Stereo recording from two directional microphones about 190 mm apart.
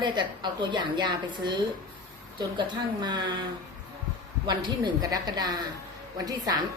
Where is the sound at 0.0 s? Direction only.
25° right (ahead or behind).